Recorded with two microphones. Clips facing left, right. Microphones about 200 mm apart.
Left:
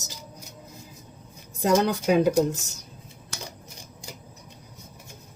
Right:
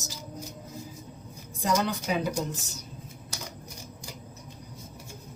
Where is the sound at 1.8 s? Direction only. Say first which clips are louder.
Left 8 dB; 45° left (ahead or behind).